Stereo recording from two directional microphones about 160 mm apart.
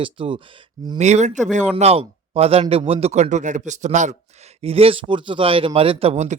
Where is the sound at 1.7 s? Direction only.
35° right (ahead or behind).